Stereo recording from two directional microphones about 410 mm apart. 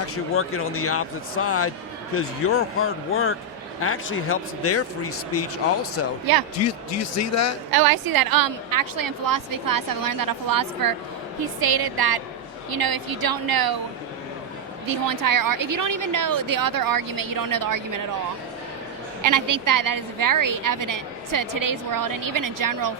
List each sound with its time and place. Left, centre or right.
0.3 s speech: left
7.7 s a woman's voice: right
14.8 s a woman's voice: right
19.2 s a woman's voice: right